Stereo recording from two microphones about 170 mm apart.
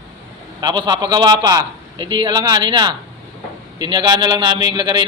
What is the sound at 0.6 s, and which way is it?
A man's voice, 25° right (ahead or behind).